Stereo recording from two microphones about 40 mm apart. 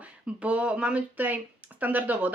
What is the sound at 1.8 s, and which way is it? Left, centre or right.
Speech, right.